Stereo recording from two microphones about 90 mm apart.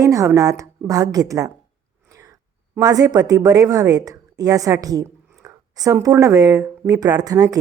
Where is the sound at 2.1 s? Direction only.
40° right (ahead or behind).